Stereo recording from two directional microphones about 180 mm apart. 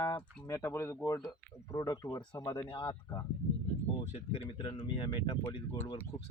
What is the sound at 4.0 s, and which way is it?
Speech, 40° left (ahead or behind).